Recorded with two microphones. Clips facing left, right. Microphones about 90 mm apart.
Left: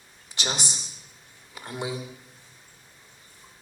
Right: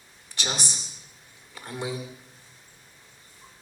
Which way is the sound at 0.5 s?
20° left (ahead or behind).